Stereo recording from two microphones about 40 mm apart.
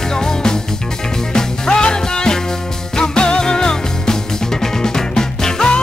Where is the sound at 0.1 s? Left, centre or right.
Centre.